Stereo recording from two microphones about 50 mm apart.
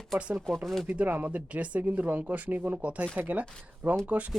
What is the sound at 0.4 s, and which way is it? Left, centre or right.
Speech, centre.